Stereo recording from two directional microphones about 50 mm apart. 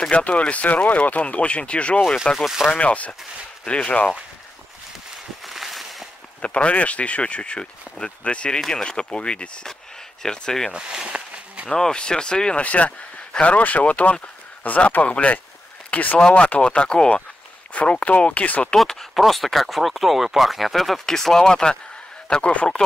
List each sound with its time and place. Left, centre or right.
0.1 s speech: left
2.3 s speech: centre
2.7 s speech: left
5.4 s a sound: centre
6.4 s speech: left
8.5 s speech: centre
10.7 s a sound: centre
11.7 s speech: centre; by 16.2 s left
16.2 s speech: left
18.9 s speech: centre
22.3 s speech: left